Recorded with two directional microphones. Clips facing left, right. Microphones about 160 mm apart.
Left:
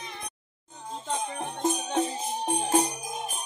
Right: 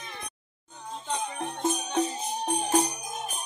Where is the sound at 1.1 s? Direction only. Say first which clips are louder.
Even; 15° left (ahead or behind).